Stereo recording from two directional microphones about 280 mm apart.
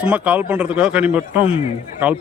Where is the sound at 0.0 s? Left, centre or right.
Centre.